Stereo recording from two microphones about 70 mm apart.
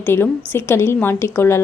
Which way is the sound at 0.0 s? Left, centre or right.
Left.